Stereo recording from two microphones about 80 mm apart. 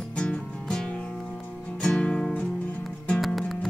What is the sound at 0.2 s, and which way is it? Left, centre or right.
Music, centre.